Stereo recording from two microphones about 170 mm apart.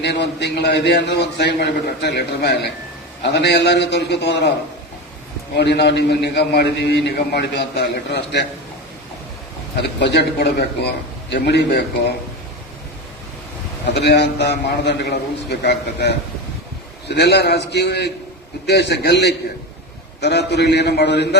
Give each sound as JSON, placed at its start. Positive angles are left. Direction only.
{"t": 0.0, "sound": "a man's voice", "side_deg": 85}
{"t": 5.5, "sound": "a man's voice", "side_deg": 75}
{"t": 10.0, "sound": "a man's voice", "side_deg": 80}
{"t": 13.8, "sound": "a man's voice", "side_deg": 80}
{"t": 20.5, "sound": "a man's voice", "side_deg": 75}